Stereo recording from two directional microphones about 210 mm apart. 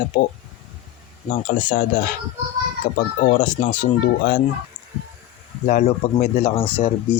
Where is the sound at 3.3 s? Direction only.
40° left (ahead or behind).